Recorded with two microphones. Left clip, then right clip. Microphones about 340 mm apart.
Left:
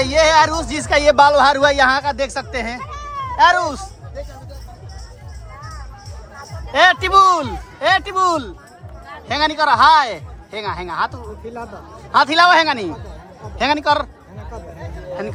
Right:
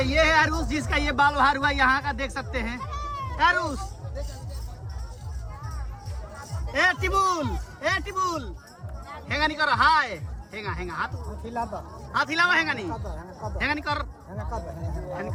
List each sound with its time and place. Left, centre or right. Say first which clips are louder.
0.0 s speech: left 8 dB; centre
2.8 s cat: left 5 dB; left
3.3 s speech: left 9 dB; centre
6.7 s speech: left 11 dB; centre
9.3 s a man's voice: left 8 dB; centre
12.1 s speech: left 11 dB; centre